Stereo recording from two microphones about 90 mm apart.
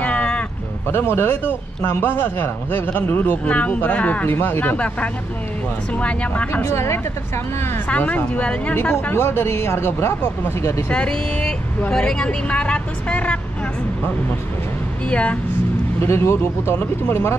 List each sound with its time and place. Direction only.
0.0 s a sound: 15° left (ahead or behind)
0.9 s speech: 25° left (ahead or behind)
6.5 s speech: 30° left (ahead or behind)
7.9 s speech: 20° left (ahead or behind)
8.7 s speech: 25° left (ahead or behind)
10.9 s speech: 10° left (ahead or behind)
15.0 s speech: 15° left (ahead or behind)
16.0 s speech: 30° left (ahead or behind)